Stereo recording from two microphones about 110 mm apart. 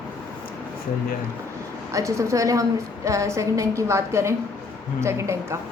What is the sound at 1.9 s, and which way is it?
A woman's voice, 30° right (ahead or behind).